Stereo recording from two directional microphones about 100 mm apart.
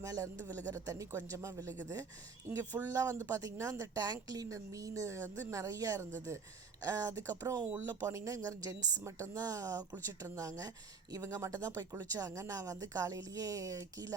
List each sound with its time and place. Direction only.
0.0 s a woman's voice: 35° right (ahead or behind)